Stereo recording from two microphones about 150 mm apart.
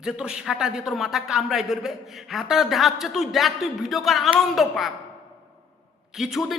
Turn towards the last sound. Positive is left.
turn(degrees=0)  # may be behind; listen again after turning